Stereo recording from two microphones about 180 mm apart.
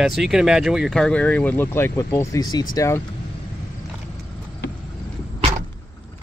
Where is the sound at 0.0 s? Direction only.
Centre (ahead or behind); by 3.0 s 15° left (ahead or behind).